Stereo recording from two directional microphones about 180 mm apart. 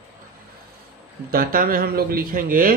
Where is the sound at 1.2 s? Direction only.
55° right (ahead or behind).